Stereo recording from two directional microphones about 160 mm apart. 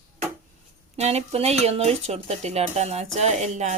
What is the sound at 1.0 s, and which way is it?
Speech, 40° right (ahead or behind).